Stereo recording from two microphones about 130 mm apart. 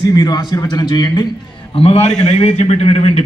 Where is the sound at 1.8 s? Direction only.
45° left (ahead or behind).